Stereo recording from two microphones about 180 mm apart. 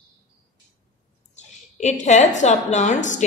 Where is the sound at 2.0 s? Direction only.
40° left (ahead or behind).